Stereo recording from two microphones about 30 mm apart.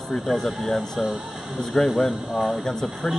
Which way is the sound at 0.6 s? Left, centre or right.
Centre.